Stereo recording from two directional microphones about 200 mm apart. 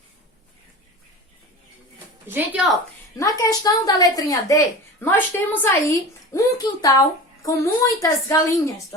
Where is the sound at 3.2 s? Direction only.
20° left (ahead or behind).